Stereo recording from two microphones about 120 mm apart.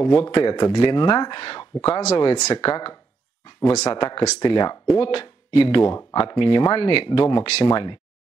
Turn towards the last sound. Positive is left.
turn(degrees=35)  # may be behind; listen again after turning